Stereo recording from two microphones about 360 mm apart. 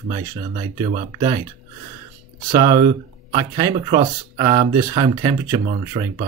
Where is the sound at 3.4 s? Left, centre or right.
Centre.